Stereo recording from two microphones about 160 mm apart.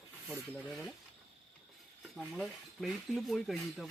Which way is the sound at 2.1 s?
5° right (ahead or behind).